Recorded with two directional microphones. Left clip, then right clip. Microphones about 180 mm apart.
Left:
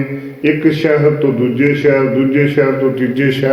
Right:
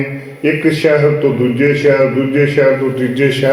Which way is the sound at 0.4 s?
30° right (ahead or behind).